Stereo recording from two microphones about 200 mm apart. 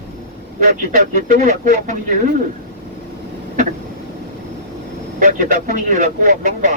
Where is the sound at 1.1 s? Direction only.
40° right (ahead or behind).